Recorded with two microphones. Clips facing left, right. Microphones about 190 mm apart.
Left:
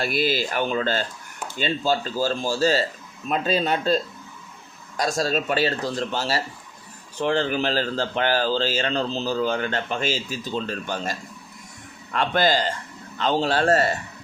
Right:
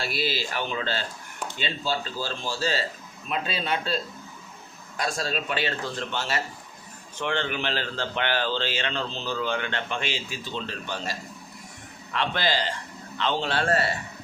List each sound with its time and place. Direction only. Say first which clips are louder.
0.0 s speech: left 6 dB; 50° left (ahead or behind)